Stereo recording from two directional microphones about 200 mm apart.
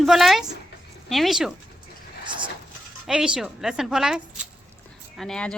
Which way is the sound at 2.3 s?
25° right (ahead or behind).